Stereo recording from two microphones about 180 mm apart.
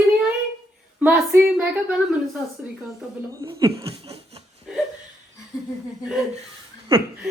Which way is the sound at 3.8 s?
30° right (ahead or behind).